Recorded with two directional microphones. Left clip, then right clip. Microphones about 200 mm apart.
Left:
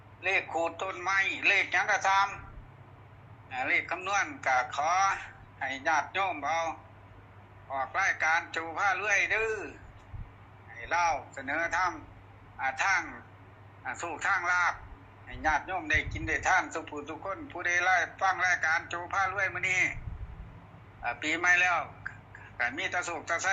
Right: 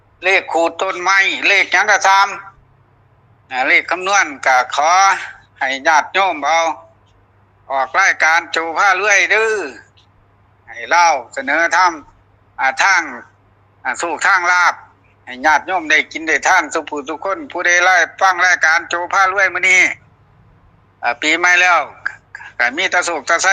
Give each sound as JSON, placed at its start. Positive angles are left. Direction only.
{"t": 0.2, "sound": "a man's voice", "side_deg": -65}
{"t": 3.5, "sound": "a man's voice", "side_deg": -65}
{"t": 21.0, "sound": "a man's voice", "side_deg": -65}